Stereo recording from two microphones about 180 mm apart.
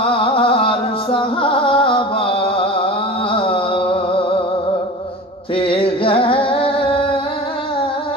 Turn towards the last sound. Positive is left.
turn(degrees=30)  # may be behind; listen again after turning